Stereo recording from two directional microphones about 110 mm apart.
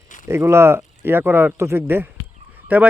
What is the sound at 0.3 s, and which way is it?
Speech, 25° right (ahead or behind).